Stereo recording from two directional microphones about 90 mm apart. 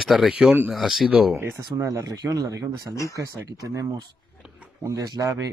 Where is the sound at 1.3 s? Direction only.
30° right (ahead or behind).